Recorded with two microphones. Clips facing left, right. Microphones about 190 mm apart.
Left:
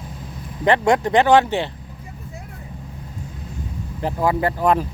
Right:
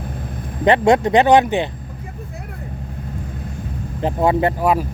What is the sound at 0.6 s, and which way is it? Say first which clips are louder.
Speech: right 3 dB; 20° right (ahead or behind).